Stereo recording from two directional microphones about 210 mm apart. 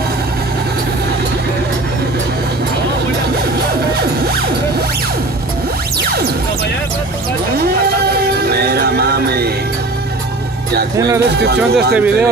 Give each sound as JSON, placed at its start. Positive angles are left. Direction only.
{"t": 7.5, "sound": "music", "side_deg": -50}
{"t": 11.3, "sound": "speech", "side_deg": -50}
{"t": 11.7, "sound": "speech", "side_deg": -5}